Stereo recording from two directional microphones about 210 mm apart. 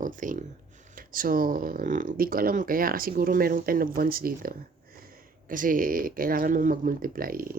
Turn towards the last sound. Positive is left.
turn(degrees=-45)  # may be behind; listen again after turning